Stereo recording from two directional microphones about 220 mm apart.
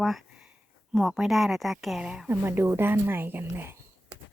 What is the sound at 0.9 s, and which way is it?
Speech, centre (ahead or behind).